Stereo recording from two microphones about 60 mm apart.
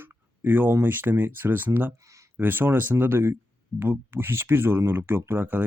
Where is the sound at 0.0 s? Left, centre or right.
Right.